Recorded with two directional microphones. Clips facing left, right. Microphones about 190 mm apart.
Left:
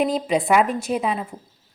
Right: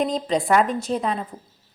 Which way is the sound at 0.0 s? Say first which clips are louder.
Left 2 dB; 5° left (ahead or behind).